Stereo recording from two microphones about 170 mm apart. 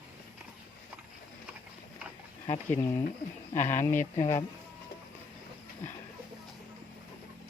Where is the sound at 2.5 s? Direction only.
15° left (ahead or behind).